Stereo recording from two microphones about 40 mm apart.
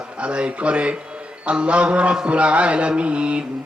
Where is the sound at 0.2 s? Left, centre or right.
Right.